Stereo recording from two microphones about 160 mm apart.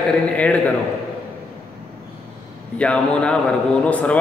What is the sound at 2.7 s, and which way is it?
A man's voice, 5° left (ahead or behind).